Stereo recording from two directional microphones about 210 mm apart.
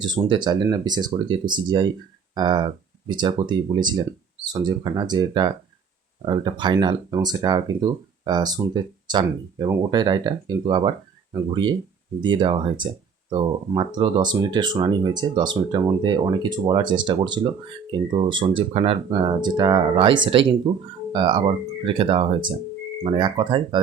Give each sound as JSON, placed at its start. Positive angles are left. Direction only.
{"t": 0.0, "sound": "speech", "side_deg": -20}
{"t": 12.2, "sound": "speech", "side_deg": -20}